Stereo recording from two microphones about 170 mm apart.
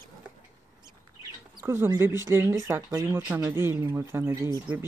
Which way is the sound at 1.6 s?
20° right (ahead or behind).